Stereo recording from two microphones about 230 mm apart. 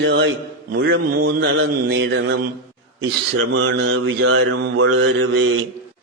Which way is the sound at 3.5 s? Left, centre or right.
Right.